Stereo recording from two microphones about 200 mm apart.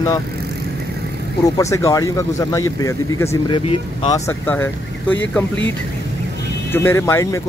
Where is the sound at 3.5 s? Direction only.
25° left (ahead or behind).